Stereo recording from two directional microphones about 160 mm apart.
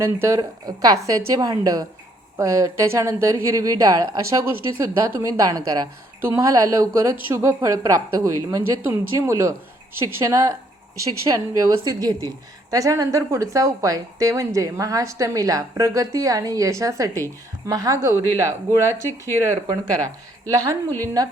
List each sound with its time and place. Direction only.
0.0 s a woman's voice: 15° right (ahead or behind)